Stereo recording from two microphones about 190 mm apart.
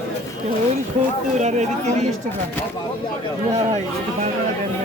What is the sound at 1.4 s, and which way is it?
Speech, 35° right (ahead or behind).